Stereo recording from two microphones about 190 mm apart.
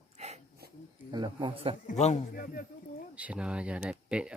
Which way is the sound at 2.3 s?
50° left (ahead or behind).